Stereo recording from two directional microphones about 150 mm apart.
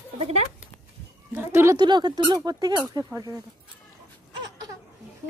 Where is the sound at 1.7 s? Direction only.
30° right (ahead or behind).